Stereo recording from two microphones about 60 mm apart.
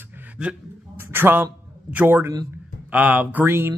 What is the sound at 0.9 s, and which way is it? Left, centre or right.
A man's voice, right.